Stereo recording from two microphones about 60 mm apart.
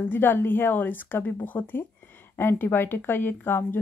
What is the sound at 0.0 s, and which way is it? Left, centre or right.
Speech, left.